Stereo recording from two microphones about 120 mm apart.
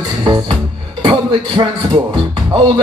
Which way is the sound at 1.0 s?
40° right (ahead or behind).